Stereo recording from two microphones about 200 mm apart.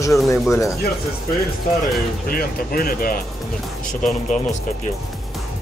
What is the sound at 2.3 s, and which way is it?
Speech, 45° left (ahead or behind).